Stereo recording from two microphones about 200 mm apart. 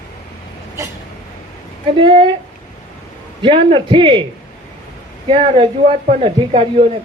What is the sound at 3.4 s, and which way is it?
Speech, 25° right (ahead or behind).